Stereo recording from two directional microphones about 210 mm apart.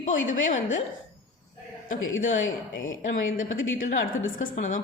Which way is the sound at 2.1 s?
65° left (ahead or behind).